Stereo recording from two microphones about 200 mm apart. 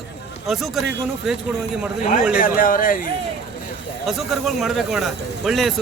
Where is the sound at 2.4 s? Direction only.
45° left (ahead or behind).